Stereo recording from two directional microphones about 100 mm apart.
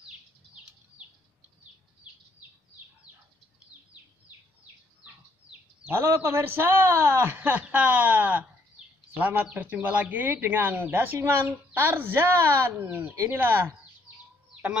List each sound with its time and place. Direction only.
5.9 s speech: 20° right (ahead or behind)